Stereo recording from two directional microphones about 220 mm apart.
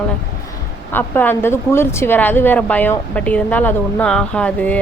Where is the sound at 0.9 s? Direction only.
10° left (ahead or behind).